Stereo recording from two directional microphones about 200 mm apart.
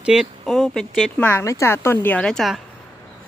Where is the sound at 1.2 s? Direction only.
10° left (ahead or behind).